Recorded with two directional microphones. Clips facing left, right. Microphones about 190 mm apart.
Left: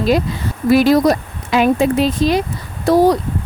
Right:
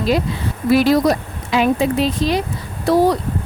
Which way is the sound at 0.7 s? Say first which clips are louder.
Left 2 dB; 45° left (ahead or behind).